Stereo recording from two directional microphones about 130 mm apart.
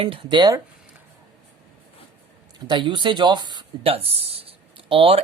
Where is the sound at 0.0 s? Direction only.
40° right (ahead or behind).